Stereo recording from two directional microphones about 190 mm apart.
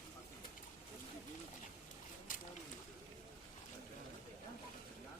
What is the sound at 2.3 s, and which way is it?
Boat, 45° left (ahead or behind).